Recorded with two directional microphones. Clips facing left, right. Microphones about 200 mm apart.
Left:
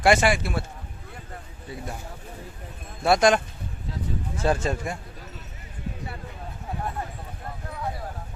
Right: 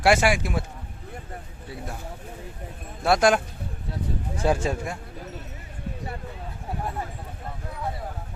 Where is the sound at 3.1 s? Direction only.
5° right (ahead or behind).